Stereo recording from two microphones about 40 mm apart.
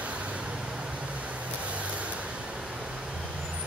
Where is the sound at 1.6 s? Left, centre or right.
Right.